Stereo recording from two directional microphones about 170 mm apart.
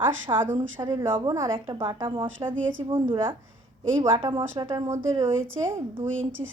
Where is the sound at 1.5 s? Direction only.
30° right (ahead or behind).